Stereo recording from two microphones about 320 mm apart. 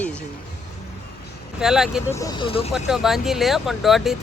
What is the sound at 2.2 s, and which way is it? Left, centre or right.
Speech, centre.